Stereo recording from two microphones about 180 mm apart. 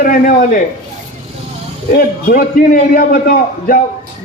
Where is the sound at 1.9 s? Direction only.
50° left (ahead or behind).